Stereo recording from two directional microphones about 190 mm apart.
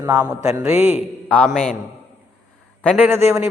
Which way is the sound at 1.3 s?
5° left (ahead or behind).